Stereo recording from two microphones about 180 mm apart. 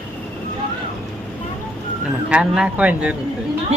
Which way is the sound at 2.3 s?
5° right (ahead or behind).